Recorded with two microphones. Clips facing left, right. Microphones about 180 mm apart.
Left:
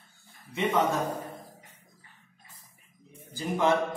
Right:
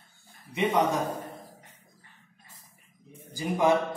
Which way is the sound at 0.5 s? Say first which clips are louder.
Right 1 dB; 20° right (ahead or behind).